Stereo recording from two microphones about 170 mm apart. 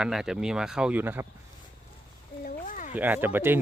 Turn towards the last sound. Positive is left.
turn(degrees=-10)  # may be behind; listen again after turning